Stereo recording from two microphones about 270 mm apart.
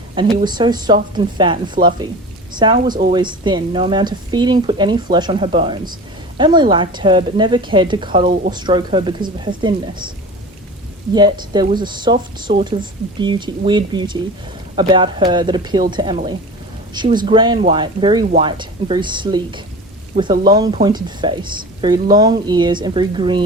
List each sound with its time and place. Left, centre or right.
0.2 s speech: centre
11.1 s speech: centre